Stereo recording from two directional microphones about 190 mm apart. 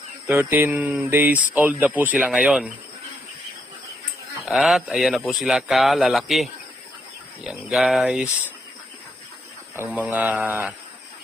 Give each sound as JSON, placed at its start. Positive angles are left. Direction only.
{"t": 0.3, "sound": "speech", "side_deg": -10}
{"t": 4.4, "sound": "speech", "side_deg": 0}
{"t": 9.7, "sound": "speech", "side_deg": -10}